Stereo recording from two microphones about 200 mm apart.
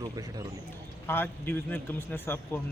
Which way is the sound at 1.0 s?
10° left (ahead or behind).